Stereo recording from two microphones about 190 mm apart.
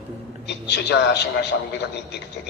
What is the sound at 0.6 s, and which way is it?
Speech, 60° left (ahead or behind).